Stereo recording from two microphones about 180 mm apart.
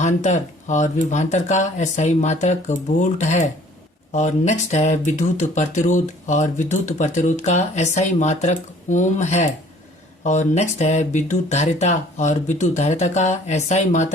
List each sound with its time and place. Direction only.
0.0 s speech: 40° left (ahead or behind)